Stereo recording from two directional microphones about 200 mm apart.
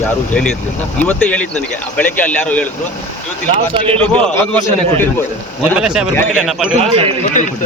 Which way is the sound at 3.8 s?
25° right (ahead or behind).